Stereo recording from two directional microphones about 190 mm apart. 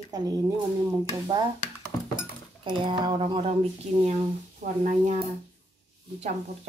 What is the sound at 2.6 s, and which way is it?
Speech, 25° right (ahead or behind).